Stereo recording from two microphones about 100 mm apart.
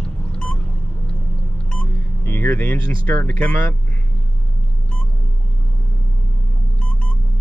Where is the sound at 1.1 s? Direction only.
10° left (ahead or behind).